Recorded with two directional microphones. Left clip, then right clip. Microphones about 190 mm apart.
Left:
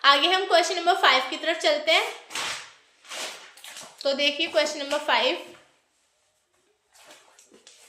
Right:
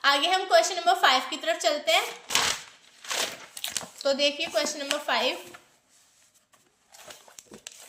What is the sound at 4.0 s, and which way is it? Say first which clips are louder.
A woman's voice: left 1 dB; 25° right (ahead or behind).